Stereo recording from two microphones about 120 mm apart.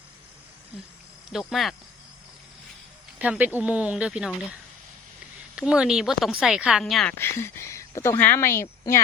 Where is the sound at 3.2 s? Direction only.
10° right (ahead or behind).